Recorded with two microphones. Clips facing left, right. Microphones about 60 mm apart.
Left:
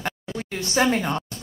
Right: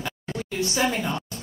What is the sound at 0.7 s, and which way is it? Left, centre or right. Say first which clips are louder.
Speech: left 5 dB; left.